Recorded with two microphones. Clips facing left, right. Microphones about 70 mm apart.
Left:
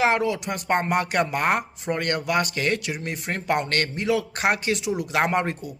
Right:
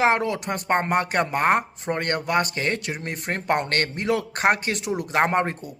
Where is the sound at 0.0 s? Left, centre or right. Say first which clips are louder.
Right 1 dB; right.